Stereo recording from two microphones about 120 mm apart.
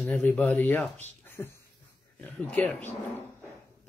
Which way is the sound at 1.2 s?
20° left (ahead or behind).